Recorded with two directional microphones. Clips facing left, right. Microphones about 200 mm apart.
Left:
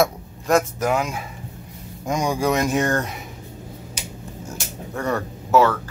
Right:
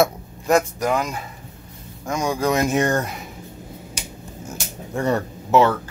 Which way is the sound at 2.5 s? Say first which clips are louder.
Right 1 dB; 10° right (ahead or behind).